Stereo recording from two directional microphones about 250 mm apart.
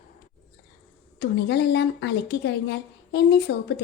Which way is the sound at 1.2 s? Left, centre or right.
Left.